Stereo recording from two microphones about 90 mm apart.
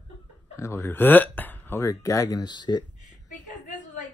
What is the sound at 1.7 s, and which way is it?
Speech, 35° left (ahead or behind).